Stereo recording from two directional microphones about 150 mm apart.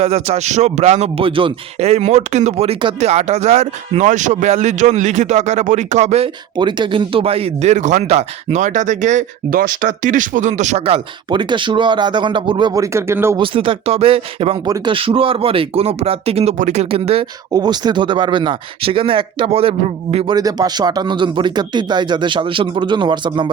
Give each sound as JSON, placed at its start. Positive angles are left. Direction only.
{"t": 0.0, "sound": "a man's voice", "side_deg": -45}
{"t": 6.6, "sound": "speech", "side_deg": -30}
{"t": 13.3, "sound": "speech", "side_deg": -35}
{"t": 17.5, "sound": "speech", "side_deg": -25}
{"t": 20.3, "sound": "speech", "side_deg": -25}